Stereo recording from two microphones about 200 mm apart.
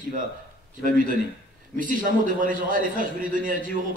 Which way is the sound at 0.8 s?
45° right (ahead or behind).